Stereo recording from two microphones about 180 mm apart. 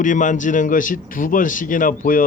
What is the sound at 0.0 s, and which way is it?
Speech, 45° left (ahead or behind).